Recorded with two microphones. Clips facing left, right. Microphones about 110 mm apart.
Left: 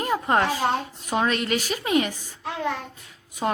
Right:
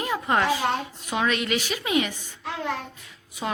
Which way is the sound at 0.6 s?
25° left (ahead or behind).